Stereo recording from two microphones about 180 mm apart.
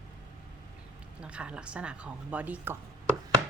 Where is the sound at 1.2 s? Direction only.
5° right (ahead or behind).